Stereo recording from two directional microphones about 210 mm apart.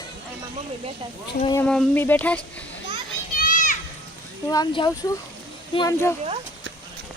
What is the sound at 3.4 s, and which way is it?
Children playing, 40° left (ahead or behind).